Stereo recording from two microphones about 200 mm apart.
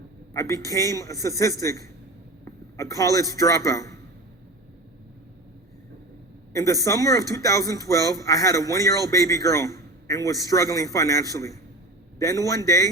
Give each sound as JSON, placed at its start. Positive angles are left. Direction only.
{"t": 0.3, "sound": "a man's voice", "side_deg": 15}
{"t": 6.5, "sound": "a man's voice", "side_deg": 15}